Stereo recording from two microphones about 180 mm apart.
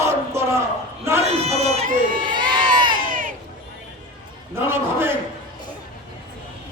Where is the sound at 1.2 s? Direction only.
35° right (ahead or behind).